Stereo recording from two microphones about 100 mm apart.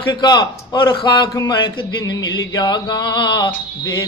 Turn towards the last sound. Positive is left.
turn(degrees=50)  # may be behind; listen again after turning